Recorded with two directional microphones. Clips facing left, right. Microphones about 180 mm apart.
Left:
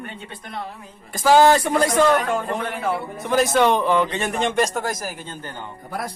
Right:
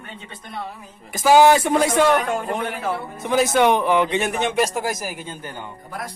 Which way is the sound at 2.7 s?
Centre (ahead or behind).